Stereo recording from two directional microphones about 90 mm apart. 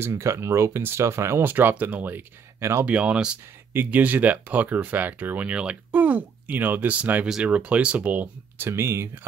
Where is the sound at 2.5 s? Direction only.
35° right (ahead or behind).